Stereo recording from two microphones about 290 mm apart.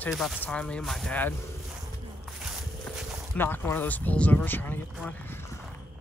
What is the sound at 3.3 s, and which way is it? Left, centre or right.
Speech, centre.